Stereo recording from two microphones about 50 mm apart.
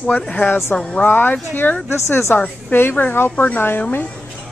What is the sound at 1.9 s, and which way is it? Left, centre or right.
Speech, left.